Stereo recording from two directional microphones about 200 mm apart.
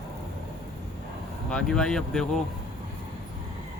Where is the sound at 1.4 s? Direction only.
5° left (ahead or behind).